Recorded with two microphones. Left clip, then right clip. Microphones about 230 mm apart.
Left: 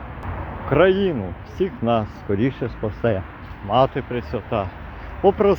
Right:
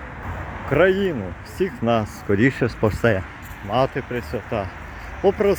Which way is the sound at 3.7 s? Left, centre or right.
Centre.